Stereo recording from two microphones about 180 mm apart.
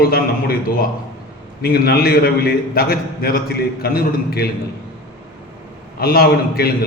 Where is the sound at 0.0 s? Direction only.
55° left (ahead or behind).